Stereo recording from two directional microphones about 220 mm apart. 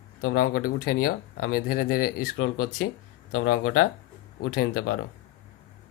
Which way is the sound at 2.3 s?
65° left (ahead or behind).